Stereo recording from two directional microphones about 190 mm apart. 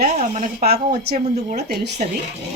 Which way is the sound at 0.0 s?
45° right (ahead or behind).